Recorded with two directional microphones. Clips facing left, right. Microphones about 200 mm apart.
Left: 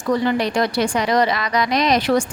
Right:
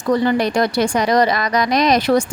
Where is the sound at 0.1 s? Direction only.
45° right (ahead or behind).